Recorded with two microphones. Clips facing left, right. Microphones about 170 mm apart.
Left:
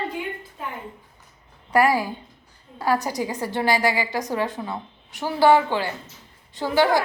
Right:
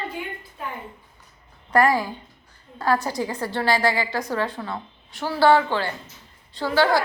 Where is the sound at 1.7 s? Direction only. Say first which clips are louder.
Even; 10° left (ahead or behind).